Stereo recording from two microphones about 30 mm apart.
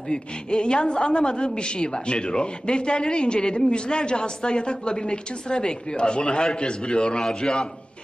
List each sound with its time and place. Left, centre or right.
0.1 s a woman's voice: left